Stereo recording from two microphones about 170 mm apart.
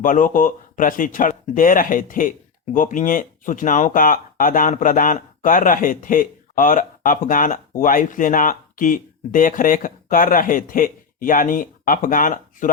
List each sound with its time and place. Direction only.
0.0 s a man's voice: 50° left (ahead or behind)